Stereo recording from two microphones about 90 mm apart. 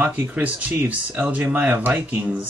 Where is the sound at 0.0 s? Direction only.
20° right (ahead or behind).